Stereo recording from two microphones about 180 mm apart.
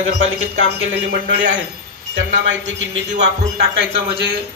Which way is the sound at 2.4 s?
90° right.